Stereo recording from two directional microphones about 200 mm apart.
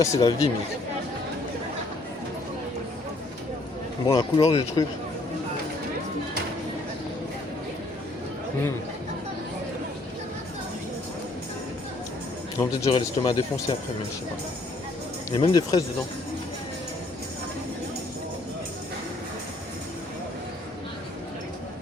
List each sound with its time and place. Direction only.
0.0 s speech: 15° left (ahead or behind)
4.0 s speech: 20° left (ahead or behind)
12.5 s speech: 20° left (ahead or behind)
15.3 s speech: 20° left (ahead or behind)